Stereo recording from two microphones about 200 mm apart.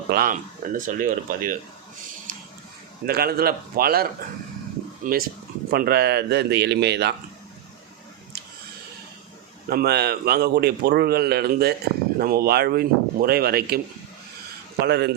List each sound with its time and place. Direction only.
0.1 s a man's voice: 45° right (ahead or behind)
3.1 s a man's voice: 50° right (ahead or behind)
9.6 s a man's voice: 50° right (ahead or behind)